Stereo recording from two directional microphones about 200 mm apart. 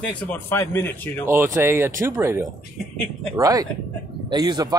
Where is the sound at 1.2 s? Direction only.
15° right (ahead or behind).